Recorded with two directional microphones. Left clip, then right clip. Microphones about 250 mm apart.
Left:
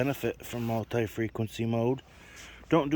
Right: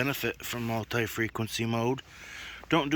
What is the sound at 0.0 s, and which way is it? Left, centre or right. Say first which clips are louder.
Speech: even; centre.